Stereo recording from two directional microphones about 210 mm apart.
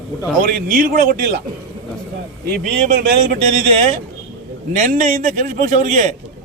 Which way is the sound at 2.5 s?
45° right (ahead or behind).